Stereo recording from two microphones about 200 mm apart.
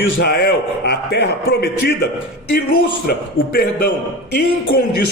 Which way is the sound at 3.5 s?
50° left (ahead or behind).